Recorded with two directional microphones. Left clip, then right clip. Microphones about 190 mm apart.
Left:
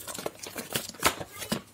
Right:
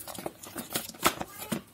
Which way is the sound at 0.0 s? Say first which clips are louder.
Left 3 dB; 25° left (ahead or behind).